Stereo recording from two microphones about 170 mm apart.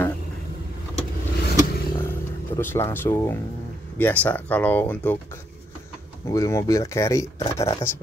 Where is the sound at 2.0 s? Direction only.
15° left (ahead or behind).